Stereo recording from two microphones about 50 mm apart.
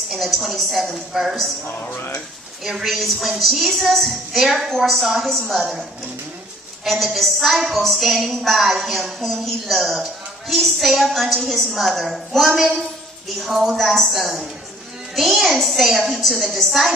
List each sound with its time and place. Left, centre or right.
0.1 s a woman's voice: centre
1.7 s speech: left
2.6 s a woman's voice: centre